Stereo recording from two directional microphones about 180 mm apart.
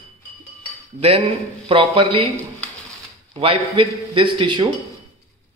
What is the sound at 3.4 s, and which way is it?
A man's voice, 30° right (ahead or behind).